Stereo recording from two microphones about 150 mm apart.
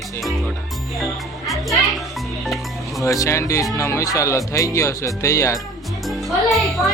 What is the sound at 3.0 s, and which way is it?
Speech, 20° left (ahead or behind).